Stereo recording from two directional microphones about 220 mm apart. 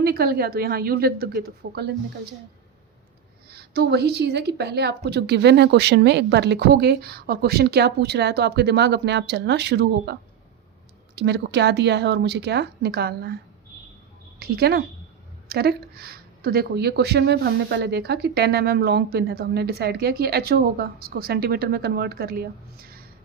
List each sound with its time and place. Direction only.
0.0 s speech: 45° right (ahead or behind)
3.5 s speech: 50° right (ahead or behind)
14.3 s speech: 45° right (ahead or behind)